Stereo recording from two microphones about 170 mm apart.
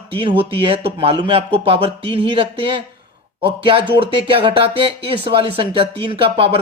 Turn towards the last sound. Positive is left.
turn(degrees=-30)  # may be behind; listen again after turning